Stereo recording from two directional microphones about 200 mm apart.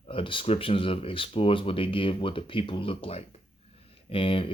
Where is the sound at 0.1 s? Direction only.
25° left (ahead or behind).